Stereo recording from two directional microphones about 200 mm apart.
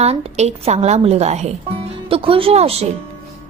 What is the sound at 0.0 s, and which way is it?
A woman's voice, 30° right (ahead or behind).